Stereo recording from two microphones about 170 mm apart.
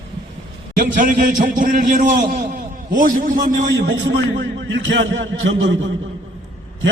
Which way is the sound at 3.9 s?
90° right.